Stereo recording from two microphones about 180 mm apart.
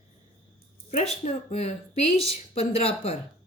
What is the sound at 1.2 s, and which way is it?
Speech, 35° left (ahead or behind).